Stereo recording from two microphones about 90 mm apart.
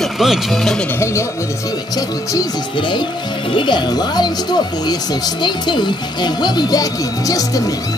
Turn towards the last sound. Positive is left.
turn(degrees=40)  # may be behind; listen again after turning